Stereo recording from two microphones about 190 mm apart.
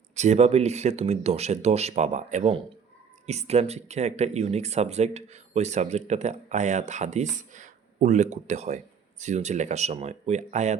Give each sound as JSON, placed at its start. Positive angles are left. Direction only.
{"t": 0.2, "sound": "speech", "side_deg": -35}